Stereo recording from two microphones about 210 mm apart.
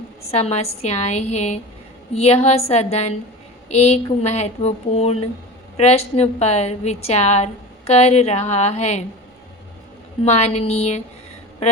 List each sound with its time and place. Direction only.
0.3 s a woman's voice: 30° left (ahead or behind)
10.2 s a woman's voice: 30° left (ahead or behind)